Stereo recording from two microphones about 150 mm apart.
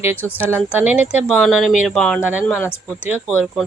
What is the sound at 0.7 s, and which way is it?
A woman's voice, 10° right (ahead or behind).